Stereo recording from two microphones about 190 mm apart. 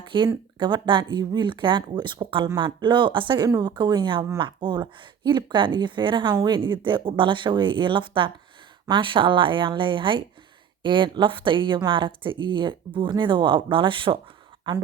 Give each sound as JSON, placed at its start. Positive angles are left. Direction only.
{"t": 0.1, "sound": "speech", "side_deg": -25}